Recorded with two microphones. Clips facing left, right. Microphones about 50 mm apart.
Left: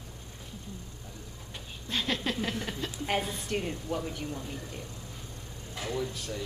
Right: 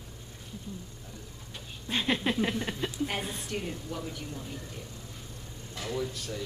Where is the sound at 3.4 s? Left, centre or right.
Centre.